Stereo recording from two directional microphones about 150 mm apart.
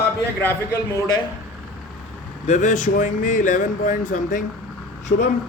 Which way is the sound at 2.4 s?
50° left (ahead or behind).